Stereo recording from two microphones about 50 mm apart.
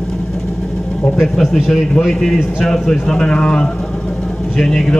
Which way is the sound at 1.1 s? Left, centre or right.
Centre.